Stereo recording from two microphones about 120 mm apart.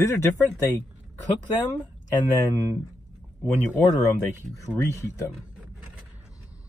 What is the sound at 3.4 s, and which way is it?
Speech, 15° left (ahead or behind).